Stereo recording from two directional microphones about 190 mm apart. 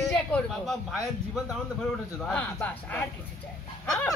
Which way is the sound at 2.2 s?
5° left (ahead or behind).